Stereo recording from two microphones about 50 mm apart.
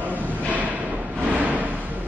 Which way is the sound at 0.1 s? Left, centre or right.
Right.